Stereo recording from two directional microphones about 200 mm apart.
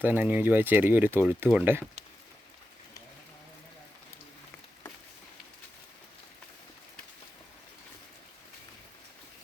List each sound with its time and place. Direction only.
0.0 s speech: 10° right (ahead or behind)